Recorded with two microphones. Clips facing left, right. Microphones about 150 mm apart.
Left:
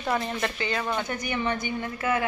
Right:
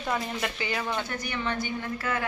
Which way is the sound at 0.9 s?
15° left (ahead or behind).